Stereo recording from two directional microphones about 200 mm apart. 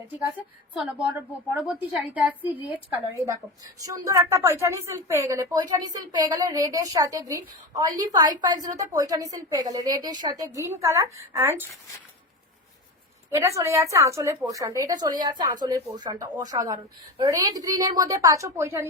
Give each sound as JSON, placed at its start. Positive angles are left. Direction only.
{"t": 1.6, "sound": "a woman's voice", "side_deg": -10}
{"t": 13.3, "sound": "a woman's voice", "side_deg": -15}